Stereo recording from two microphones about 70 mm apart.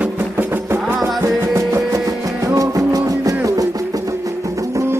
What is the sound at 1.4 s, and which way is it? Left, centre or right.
Music, right.